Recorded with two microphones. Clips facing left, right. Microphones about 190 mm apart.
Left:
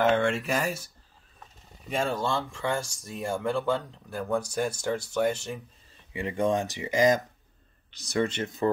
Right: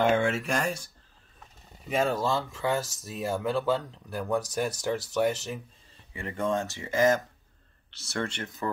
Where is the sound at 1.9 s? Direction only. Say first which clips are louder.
Right 2 dB; 5° right (ahead or behind).